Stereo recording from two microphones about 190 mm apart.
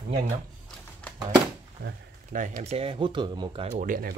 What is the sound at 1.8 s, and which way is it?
Speech, 45° right (ahead or behind).